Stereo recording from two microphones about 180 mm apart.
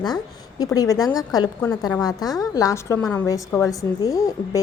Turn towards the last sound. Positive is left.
turn(degrees=20)  # may be behind; listen again after turning